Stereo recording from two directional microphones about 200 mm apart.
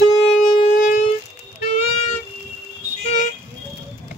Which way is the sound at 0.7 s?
40° left (ahead or behind).